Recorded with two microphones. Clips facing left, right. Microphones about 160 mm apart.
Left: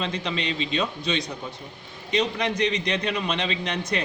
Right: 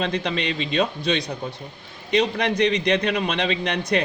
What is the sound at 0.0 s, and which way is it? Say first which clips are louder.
Speech: right 4 dB; 60° right (ahead or behind).